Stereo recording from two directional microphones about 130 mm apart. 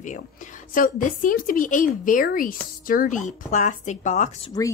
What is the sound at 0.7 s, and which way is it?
Speech, 90° left.